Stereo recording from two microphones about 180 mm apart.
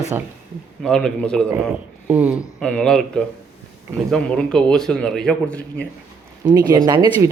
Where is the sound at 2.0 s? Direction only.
10° right (ahead or behind).